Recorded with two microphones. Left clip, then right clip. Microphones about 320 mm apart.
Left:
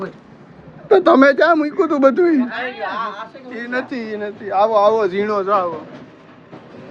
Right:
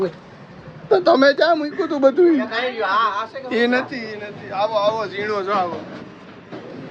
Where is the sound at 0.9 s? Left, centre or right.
Centre.